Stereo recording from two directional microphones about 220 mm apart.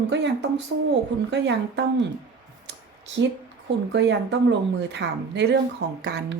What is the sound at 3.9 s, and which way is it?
Speech, 50° right (ahead or behind).